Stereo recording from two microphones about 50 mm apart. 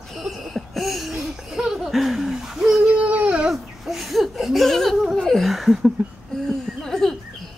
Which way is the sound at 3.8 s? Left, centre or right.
Centre.